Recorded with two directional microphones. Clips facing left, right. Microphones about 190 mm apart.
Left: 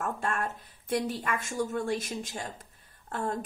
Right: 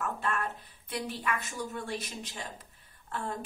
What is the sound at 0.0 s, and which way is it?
A woman's voice, 45° left (ahead or behind).